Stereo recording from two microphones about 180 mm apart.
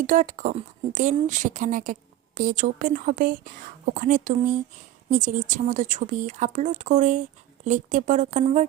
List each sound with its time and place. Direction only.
0.1 s speech: 45° right (ahead or behind)